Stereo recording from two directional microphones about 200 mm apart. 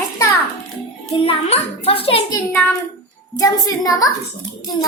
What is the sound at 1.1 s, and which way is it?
A child's voice, 30° left (ahead or behind).